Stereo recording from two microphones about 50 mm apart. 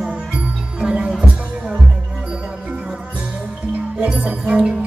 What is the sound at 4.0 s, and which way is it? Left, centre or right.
Music, right.